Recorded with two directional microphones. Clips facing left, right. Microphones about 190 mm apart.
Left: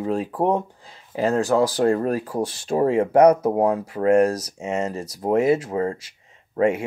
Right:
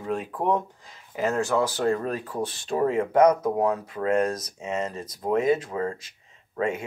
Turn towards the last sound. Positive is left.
turn(degrees=30)  # may be behind; listen again after turning